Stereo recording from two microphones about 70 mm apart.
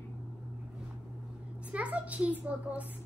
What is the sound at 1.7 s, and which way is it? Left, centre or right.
A child's voice, centre.